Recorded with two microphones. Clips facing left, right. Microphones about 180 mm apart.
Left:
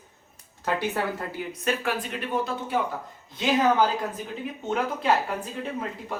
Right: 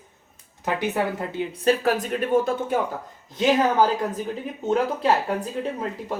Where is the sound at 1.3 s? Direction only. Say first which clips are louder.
Right 7 dB; 30° right (ahead or behind).